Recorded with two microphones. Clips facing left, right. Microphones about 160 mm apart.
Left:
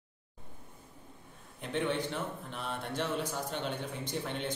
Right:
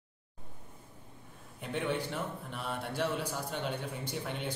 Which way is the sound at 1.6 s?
10° right (ahead or behind).